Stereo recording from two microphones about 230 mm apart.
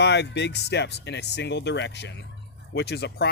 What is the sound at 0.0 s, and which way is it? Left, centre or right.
Speech, left.